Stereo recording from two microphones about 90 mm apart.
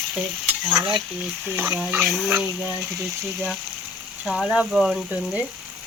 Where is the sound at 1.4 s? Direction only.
20° right (ahead or behind).